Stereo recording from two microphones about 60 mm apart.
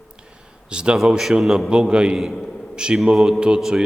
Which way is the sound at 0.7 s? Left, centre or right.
Centre.